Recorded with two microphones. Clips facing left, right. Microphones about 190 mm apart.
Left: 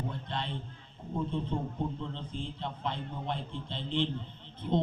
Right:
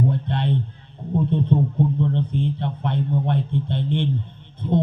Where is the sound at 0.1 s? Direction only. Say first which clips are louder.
Right 13 dB; 60° right (ahead or behind).